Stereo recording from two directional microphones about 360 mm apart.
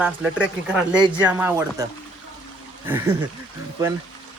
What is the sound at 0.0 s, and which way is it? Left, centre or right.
Speech, centre.